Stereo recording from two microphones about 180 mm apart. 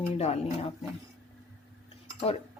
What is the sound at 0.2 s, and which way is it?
Speech, 35° left (ahead or behind).